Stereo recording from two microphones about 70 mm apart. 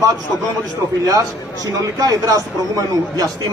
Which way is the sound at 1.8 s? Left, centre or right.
Right.